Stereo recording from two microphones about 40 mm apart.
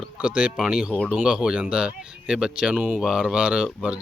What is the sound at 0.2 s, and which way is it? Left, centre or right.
Speech, right.